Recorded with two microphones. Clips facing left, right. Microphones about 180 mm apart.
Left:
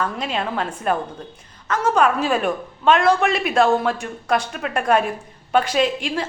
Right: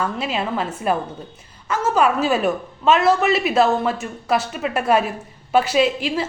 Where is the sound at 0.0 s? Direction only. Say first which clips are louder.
Right 1 dB; 5° right (ahead or behind).